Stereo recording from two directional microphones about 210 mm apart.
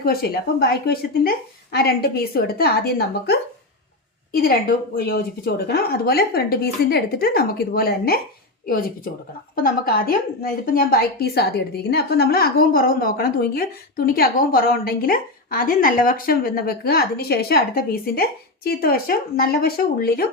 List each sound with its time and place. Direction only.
0.0 s a woman's voice: 45° left (ahead or behind)